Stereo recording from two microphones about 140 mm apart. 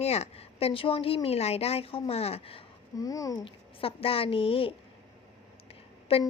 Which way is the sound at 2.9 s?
25° left (ahead or behind).